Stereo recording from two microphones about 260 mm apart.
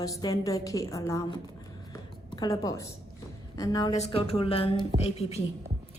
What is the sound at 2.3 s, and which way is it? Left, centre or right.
A woman's voice, centre.